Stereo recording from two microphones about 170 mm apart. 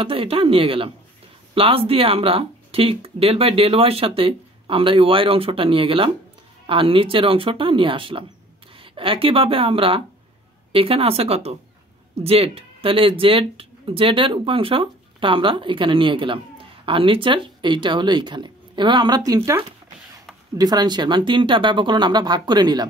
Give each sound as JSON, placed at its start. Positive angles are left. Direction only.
{"t": 0.0, "sound": "speech", "side_deg": -35}